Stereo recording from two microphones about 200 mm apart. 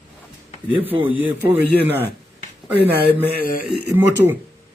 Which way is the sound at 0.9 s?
25° right (ahead or behind).